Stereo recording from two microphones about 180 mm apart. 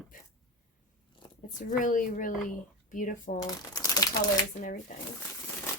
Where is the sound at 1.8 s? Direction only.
45° left (ahead or behind).